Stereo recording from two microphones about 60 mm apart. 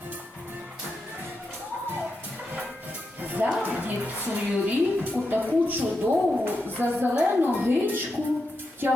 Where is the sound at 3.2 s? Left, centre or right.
Right.